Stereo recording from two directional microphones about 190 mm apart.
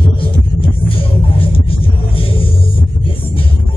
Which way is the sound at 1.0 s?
30° left (ahead or behind).